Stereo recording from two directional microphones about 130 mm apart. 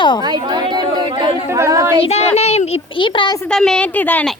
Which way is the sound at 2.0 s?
55° left (ahead or behind).